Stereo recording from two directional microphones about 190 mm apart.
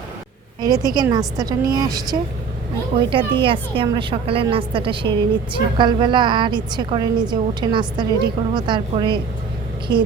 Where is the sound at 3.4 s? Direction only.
25° right (ahead or behind).